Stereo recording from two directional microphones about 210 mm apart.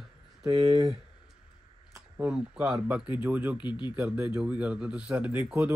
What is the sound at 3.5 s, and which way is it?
Speech, 20° left (ahead or behind).